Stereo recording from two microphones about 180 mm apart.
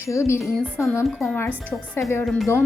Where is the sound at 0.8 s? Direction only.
15° left (ahead or behind).